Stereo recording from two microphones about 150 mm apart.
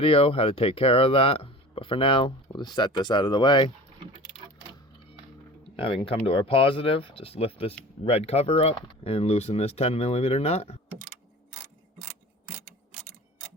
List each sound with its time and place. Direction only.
0.0 s speech: 40° left (ahead or behind)
5.7 s speech: 35° left (ahead or behind)